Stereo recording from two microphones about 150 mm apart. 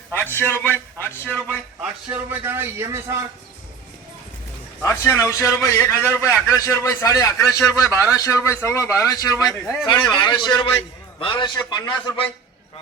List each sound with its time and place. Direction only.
0.1 s a man's voice: 15° left (ahead or behind)
1.8 s a man's voice: 10° right (ahead or behind)
4.8 s a man's voice: 20° left (ahead or behind)